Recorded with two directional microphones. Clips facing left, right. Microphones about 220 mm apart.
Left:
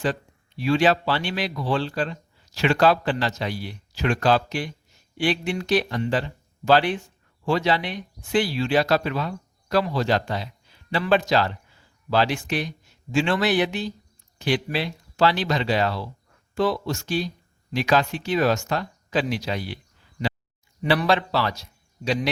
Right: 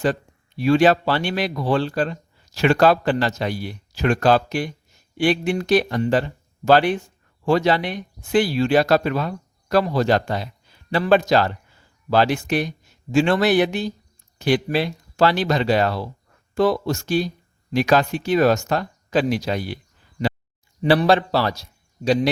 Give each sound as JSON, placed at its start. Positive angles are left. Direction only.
{"t": 0.0, "sound": "speech", "side_deg": -50}
{"t": 20.8, "sound": "speech", "side_deg": -35}